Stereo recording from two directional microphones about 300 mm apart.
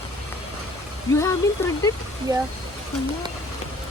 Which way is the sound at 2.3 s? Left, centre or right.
Centre.